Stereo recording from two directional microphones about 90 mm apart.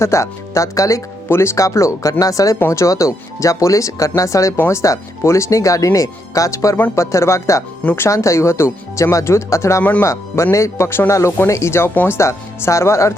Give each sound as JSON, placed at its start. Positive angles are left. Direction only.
{"t": 0.0, "sound": "speech", "side_deg": 35}
{"t": 4.5, "sound": "speech", "side_deg": 20}
{"t": 4.8, "sound": "speech", "side_deg": 35}